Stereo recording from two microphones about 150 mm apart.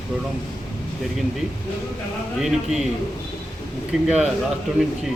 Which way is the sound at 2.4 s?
5° right (ahead or behind).